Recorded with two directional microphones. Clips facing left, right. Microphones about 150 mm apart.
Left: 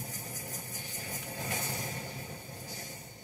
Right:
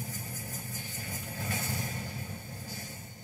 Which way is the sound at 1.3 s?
20° left (ahead or behind).